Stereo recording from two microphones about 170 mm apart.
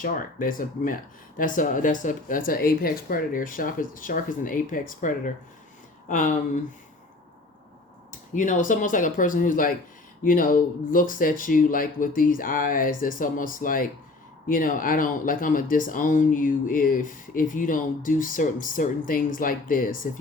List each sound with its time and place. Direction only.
0.0 s speech: 55° left (ahead or behind)
8.3 s speech: 45° left (ahead or behind)